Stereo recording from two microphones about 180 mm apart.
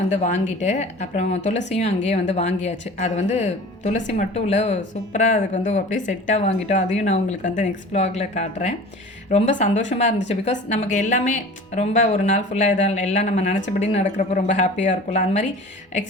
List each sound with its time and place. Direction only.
0.1 s speech: 40° left (ahead or behind)